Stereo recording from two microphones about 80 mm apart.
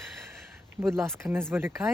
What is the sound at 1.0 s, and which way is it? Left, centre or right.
Speech, right.